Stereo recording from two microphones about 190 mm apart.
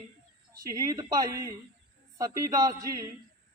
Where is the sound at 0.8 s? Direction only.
20° right (ahead or behind).